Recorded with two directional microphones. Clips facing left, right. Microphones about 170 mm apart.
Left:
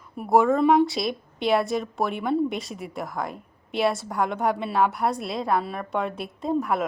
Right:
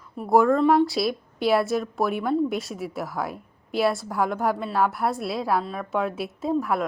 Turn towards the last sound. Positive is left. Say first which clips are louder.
# even
turn(degrees=0)  # may be behind; listen again after turning